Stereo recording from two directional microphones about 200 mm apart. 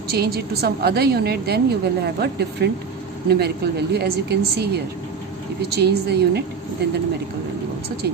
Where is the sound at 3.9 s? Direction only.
55° right (ahead or behind).